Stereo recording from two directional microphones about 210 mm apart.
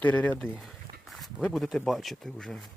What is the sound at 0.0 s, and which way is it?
Speech, 5° left (ahead or behind).